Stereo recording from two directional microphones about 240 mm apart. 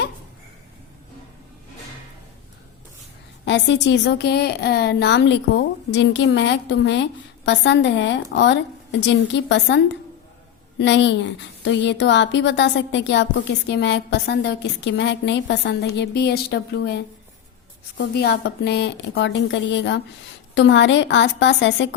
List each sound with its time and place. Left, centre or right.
3.4 s a woman's voice: left